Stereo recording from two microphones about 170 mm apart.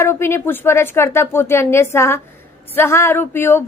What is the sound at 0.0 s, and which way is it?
A woman's voice, 15° left (ahead or behind).